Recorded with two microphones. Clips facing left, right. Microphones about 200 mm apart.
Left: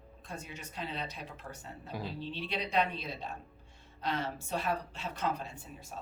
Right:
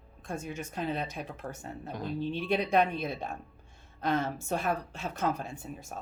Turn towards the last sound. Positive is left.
turn(degrees=-50)  # may be behind; listen again after turning